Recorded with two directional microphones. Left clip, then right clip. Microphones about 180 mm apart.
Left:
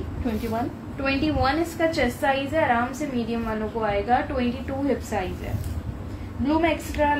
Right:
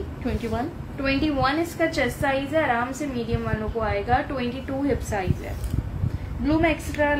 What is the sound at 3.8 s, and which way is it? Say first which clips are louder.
A woman's voice: left 1 dB; 35° right (ahead or behind).